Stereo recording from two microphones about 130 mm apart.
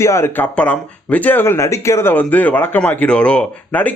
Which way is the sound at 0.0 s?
20° left (ahead or behind).